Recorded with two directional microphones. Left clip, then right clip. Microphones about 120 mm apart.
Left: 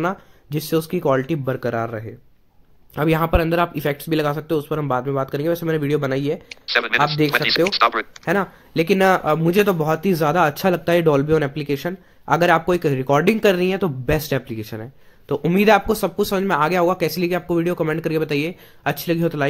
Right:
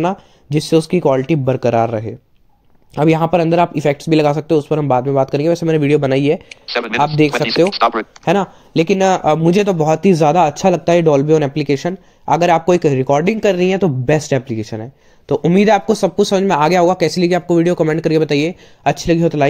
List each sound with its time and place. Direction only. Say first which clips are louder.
0.0 s speech: right 5 dB; 30° right (ahead or behind); by 2.1 s 50° right (ahead or behind)
2.9 s speech: right 6 dB; 30° right (ahead or behind)
6.5 s speech: even; 10° left (ahead or behind)
8.4 s speech: right 5 dB; 35° right (ahead or behind)
11.5 s speech: right 7 dB; 35° right (ahead or behind)